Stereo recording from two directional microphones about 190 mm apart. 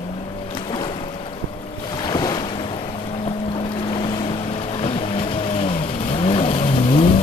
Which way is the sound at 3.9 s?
25° left (ahead or behind).